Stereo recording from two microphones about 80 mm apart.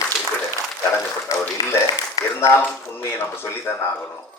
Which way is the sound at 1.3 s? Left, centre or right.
Left.